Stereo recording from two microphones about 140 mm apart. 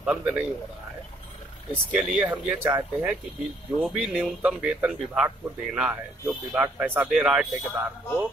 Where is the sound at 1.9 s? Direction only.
5° right (ahead or behind).